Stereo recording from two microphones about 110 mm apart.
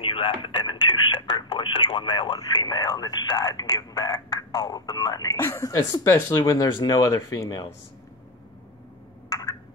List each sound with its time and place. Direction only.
0.0 s radio: 55° left (ahead or behind); by 7.6 s 30° left (ahead or behind)